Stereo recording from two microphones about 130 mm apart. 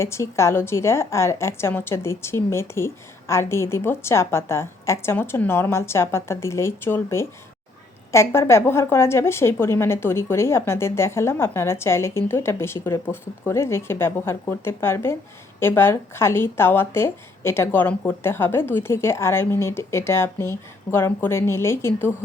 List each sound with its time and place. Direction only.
0.0 s a woman's voice: 20° left (ahead or behind)